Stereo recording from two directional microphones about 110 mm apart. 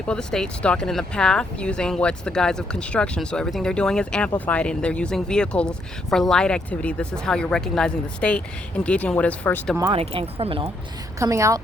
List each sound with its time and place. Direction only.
0.1 s speech: 5° left (ahead or behind)
9.9 s speech: 55° right (ahead or behind)
11.2 s a woman's voice: 30° right (ahead or behind)